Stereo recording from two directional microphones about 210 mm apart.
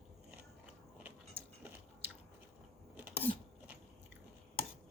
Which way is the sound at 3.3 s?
40° right (ahead or behind).